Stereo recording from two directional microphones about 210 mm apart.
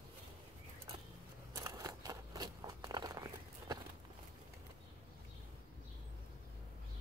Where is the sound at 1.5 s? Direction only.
15° right (ahead or behind).